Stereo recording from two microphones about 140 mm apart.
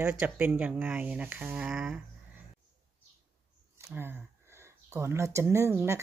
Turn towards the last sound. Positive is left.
turn(degrees=-20)  # may be behind; listen again after turning